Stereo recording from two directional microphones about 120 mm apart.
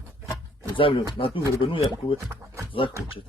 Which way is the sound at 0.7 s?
45° left (ahead or behind).